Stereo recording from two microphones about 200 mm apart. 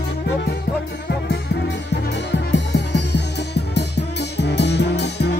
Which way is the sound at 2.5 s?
60° left (ahead or behind).